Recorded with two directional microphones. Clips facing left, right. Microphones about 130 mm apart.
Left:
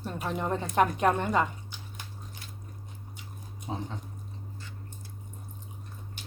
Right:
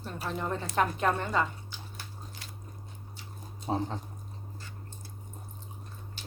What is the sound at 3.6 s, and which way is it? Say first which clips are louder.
Speech: right 5 dB; 35° right (ahead or behind).